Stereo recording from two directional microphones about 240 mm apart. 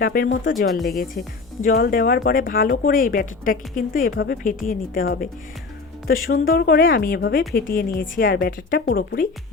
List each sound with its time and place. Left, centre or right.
0.0 s speech: left